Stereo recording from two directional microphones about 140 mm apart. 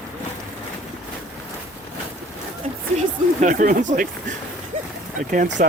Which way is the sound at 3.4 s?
70° right (ahead or behind).